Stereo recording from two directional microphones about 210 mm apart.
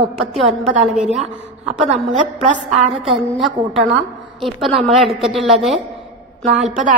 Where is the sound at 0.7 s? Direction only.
30° right (ahead or behind).